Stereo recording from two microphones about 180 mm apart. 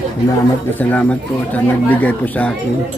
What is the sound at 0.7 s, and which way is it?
Speech, 10° left (ahead or behind).